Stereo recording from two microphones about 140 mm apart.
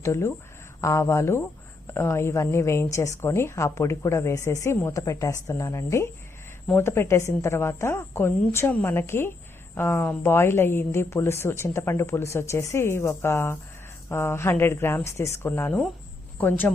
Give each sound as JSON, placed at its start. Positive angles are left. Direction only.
{"t": 0.0, "sound": "speech", "side_deg": 20}